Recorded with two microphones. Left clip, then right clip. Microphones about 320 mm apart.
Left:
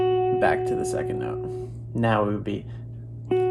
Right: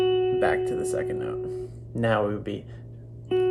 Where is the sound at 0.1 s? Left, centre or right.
Centre.